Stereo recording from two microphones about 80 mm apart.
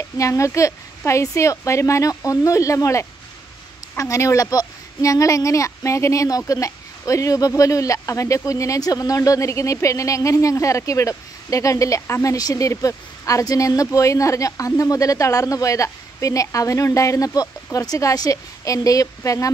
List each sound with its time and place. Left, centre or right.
0.2 s speech: left